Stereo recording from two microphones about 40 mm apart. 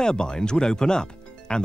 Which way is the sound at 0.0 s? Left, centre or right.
Centre.